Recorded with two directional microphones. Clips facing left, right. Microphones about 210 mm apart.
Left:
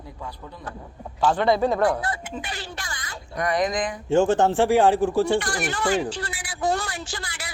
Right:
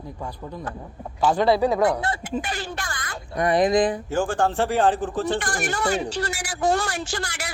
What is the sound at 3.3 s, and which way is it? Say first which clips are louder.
Speech: right 5 dB; 30° right (ahead or behind).